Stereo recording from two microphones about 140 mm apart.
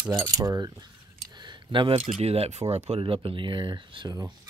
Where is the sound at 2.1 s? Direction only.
45° right (ahead or behind).